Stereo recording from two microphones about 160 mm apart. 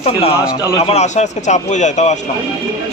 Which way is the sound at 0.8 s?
40° left (ahead or behind).